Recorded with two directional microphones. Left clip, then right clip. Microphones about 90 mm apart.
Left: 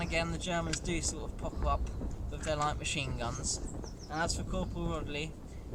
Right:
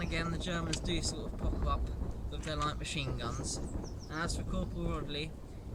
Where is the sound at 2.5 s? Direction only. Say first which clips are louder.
Left 4 dB; 25° left (ahead or behind).